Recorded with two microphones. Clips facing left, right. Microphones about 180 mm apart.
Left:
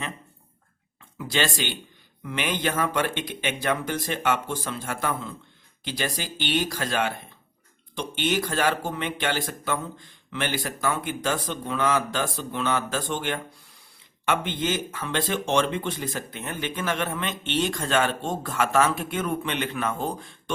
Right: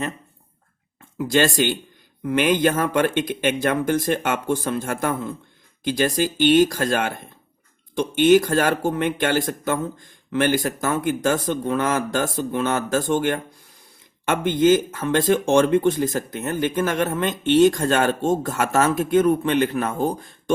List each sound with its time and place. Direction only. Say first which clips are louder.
1.2 s speech: right 8 dB; 50° right (ahead or behind)